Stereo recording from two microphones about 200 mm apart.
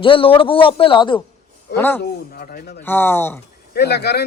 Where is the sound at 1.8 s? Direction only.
10° left (ahead or behind).